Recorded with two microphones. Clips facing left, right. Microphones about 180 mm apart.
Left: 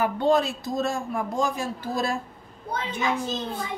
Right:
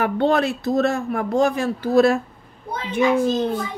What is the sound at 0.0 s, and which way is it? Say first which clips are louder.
Speech: right 3 dB; 70° right (ahead or behind).